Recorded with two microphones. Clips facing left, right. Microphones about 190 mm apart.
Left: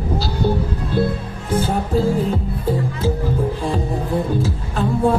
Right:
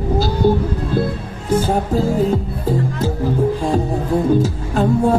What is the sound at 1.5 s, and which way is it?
Music, 40° right (ahead or behind).